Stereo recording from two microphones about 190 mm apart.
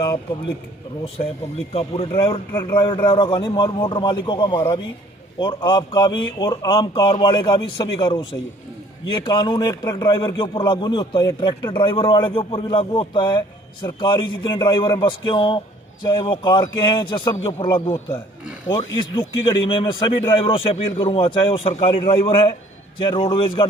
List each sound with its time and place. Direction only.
1.7 s a man's voice: 30° left (ahead or behind)
2.5 s speech: 15° left (ahead or behind)
2.7 s a man's voice: 25° left (ahead or behind)
18.9 s a man's voice: 25° left (ahead or behind)